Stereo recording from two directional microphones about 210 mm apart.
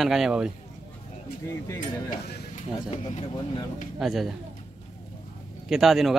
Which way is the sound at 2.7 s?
30° left (ahead or behind).